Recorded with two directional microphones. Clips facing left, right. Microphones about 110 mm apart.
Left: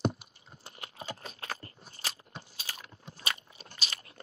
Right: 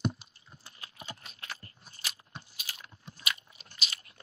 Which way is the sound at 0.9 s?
40° left (ahead or behind).